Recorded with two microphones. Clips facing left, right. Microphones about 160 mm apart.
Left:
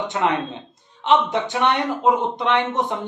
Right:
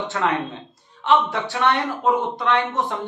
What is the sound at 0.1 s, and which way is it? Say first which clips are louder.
A man's voice: even; 20° left (ahead or behind).